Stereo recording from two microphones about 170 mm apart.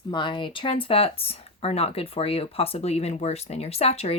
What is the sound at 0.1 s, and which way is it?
Speech, 30° left (ahead or behind).